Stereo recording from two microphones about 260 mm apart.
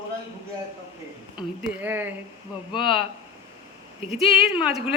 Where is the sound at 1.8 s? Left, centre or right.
Centre.